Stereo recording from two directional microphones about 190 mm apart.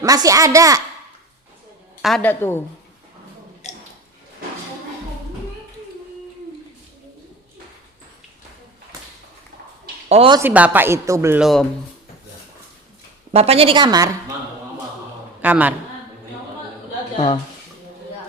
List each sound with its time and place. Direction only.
0.0 s speech: 20° right (ahead or behind)
2.0 s a woman's voice: centre (ahead or behind)
3.6 s a sound: 35° left (ahead or behind)
10.1 s speech: 30° right (ahead or behind)
10.3 s speech: 10° right (ahead or behind)
11.3 s a woman's voice: centre (ahead or behind)
13.3 s a woman's voice: 30° right (ahead or behind)
15.4 s a woman's voice: 10° right (ahead or behind)